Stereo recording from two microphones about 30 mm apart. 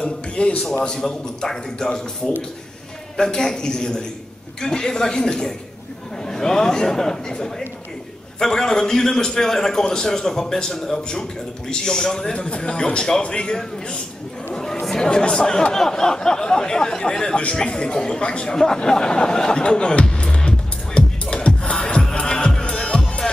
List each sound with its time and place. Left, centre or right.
0.4 s a man's voice: left
1.0 s speech: centre
1.9 s a man's voice: left
12.4 s a man's voice: left
14.5 s chatter: centre
15.0 s a man's voice: left
18.5 s a man's voice: left
19.5 s a man's voice: left
20.2 s music: left